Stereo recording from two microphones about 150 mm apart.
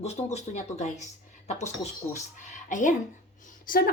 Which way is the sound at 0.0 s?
45° left (ahead or behind).